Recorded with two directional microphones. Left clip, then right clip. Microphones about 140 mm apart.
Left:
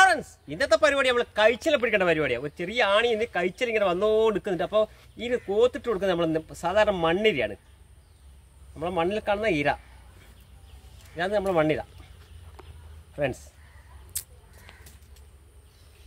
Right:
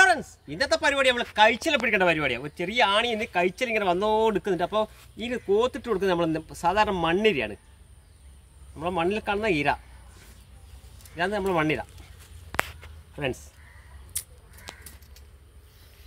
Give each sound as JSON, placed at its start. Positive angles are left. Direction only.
{"t": 0.0, "sound": "speech", "side_deg": 20}
{"t": 8.7, "sound": "speech", "side_deg": 20}
{"t": 11.1, "sound": "speech", "side_deg": 15}
{"t": 13.1, "sound": "speech", "side_deg": 25}